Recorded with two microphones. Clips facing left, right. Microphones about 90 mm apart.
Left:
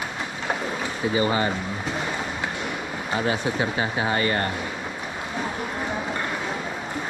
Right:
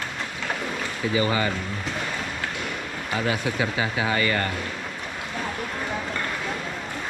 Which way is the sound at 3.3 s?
30° left (ahead or behind).